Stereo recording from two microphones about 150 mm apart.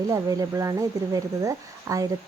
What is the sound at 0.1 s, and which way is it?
Speech, 25° right (ahead or behind).